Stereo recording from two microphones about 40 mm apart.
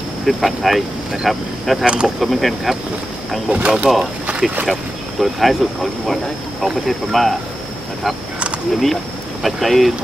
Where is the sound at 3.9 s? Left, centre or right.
Centre.